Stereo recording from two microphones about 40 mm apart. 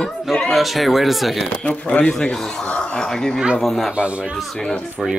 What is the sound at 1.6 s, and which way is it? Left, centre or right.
Speech, left.